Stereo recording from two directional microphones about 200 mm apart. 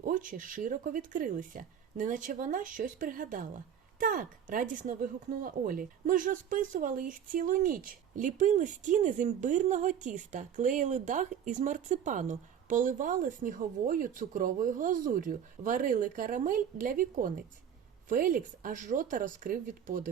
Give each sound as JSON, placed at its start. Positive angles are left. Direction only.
{"t": 0.0, "sound": "a woman's voice", "side_deg": -45}